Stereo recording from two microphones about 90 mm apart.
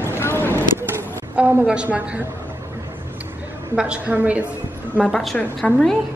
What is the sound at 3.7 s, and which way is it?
Speech, 10° right (ahead or behind).